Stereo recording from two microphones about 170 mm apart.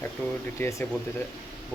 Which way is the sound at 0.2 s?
10° left (ahead or behind).